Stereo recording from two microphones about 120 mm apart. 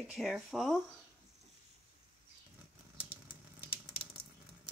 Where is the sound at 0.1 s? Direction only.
Centre (ahead or behind).